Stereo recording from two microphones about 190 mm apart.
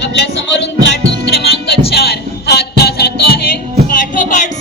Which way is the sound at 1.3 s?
55° left (ahead or behind).